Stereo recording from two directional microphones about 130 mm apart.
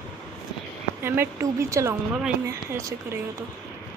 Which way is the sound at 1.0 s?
20° right (ahead or behind).